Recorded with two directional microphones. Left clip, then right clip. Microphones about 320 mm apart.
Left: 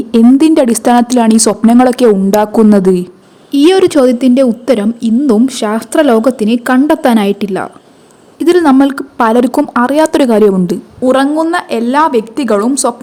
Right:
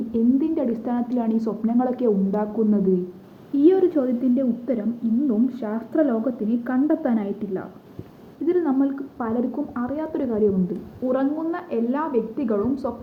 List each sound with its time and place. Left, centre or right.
0.1 s a woman's voice: left